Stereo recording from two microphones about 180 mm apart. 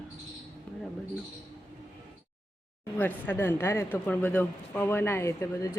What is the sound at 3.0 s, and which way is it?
Speech, 10° left (ahead or behind).